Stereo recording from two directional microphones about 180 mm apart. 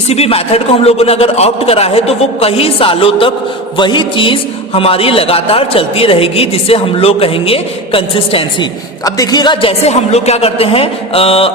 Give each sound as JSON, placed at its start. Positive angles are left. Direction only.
{"t": 0.1, "sound": "a man's voice", "side_deg": 35}
{"t": 9.0, "sound": "a man's voice", "side_deg": 20}